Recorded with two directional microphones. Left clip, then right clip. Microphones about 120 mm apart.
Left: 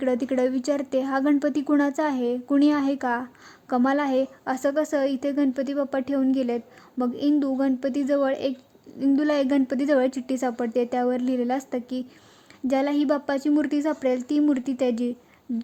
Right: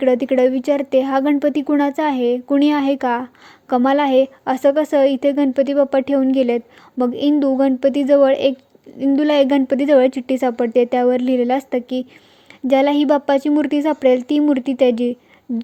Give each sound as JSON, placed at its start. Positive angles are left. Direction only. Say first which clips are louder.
{"t": 0.0, "sound": "a woman's voice", "louder": "right 9 dB", "side_deg": -15}